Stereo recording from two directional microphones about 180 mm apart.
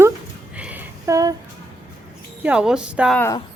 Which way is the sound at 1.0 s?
20° right (ahead or behind).